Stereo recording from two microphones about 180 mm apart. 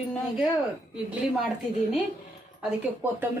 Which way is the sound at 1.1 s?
Centre (ahead or behind).